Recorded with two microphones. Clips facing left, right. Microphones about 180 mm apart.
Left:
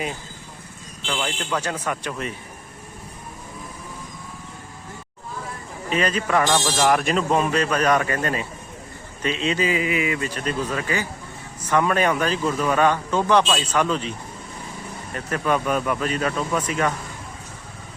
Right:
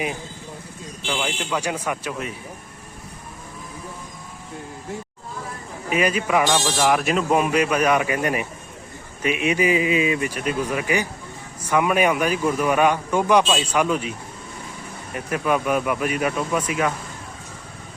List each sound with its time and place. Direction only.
1.0 s speech: 10° right (ahead or behind)
5.9 s speech: 10° right (ahead or behind)